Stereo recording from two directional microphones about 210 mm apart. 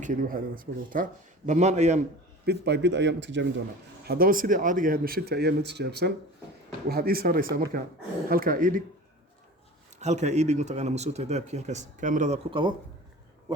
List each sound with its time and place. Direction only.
0.0 s speech: 40° right (ahead or behind)
2.4 s speech: 50° right (ahead or behind)
4.0 s speech: 45° right (ahead or behind)
10.0 s speech: 35° right (ahead or behind)